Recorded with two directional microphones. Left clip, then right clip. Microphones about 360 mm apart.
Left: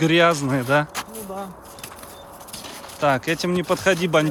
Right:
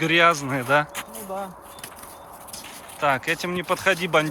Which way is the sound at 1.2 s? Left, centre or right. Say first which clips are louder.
Right 1 dB; centre.